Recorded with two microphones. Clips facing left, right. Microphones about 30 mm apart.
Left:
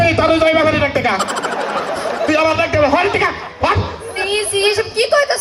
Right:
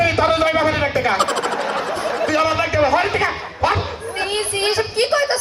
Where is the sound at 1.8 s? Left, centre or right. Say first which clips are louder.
Left 2 dB; left.